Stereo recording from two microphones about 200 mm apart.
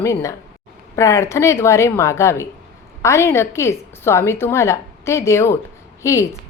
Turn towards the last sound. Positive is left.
turn(degrees=15)  # may be behind; listen again after turning